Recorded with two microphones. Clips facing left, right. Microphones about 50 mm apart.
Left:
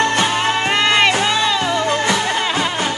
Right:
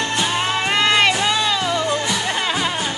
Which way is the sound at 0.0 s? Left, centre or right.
Left.